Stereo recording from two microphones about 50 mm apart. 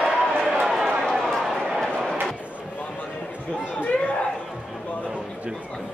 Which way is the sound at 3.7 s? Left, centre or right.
Left.